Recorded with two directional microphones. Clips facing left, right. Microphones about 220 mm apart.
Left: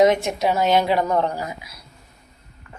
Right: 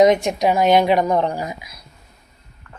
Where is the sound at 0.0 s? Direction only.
15° right (ahead or behind).